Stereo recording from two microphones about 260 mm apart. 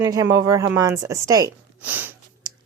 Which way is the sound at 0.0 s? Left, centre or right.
Centre.